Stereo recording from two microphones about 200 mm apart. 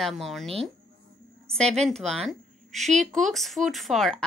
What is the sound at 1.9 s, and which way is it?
Speech, centre (ahead or behind).